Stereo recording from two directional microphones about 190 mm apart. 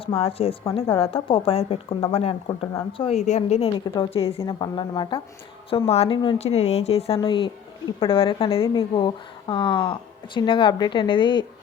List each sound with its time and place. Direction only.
0.2 s a woman's voice: 30° left (ahead or behind)
3.8 s a woman's voice: 20° left (ahead or behind)